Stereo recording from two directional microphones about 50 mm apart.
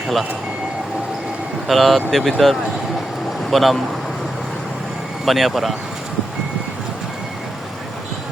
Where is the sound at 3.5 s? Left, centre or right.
Centre.